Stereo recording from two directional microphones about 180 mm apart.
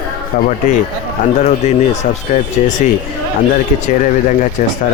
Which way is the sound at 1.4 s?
40° left (ahead or behind).